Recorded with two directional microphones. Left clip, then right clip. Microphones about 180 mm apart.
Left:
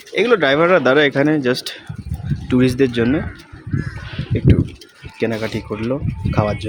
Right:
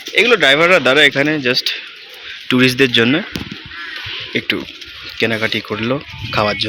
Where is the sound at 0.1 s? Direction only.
10° left (ahead or behind).